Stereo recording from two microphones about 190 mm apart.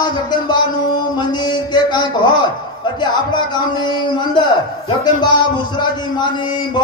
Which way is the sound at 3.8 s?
25° left (ahead or behind).